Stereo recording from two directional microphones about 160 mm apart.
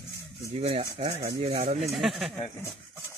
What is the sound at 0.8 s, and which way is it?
Speech, 25° right (ahead or behind).